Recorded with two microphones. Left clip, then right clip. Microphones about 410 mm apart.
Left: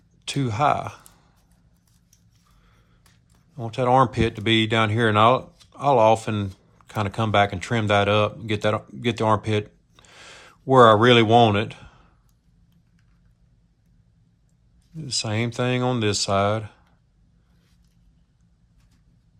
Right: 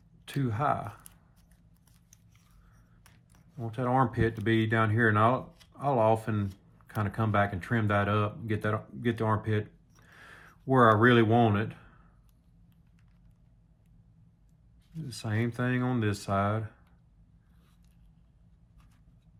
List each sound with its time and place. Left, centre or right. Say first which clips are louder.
0.3 s speech: left 9 dB; centre
3.6 s speech: left 10 dB; centre
15.2 s speech: left 7 dB; centre